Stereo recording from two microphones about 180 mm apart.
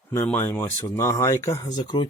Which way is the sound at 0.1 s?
10° left (ahead or behind).